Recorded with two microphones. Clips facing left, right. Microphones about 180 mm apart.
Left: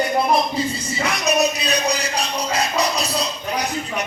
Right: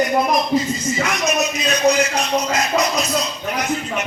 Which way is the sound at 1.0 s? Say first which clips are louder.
Left 3 dB; 35° left (ahead or behind).